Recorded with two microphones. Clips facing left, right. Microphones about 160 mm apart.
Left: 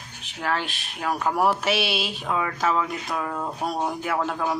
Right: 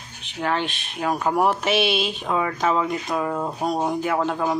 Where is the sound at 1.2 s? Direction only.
20° right (ahead or behind).